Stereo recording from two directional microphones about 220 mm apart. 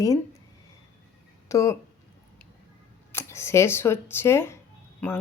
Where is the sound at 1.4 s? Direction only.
15° left (ahead or behind).